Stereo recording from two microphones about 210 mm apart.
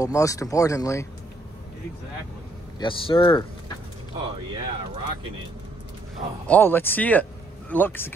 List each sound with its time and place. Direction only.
0.0 s speech: 15° left (ahead or behind)
2.8 s speech: 25° left (ahead or behind)
4.6 s speech: 25° right (ahead or behind)
6.4 s speech: 10° left (ahead or behind)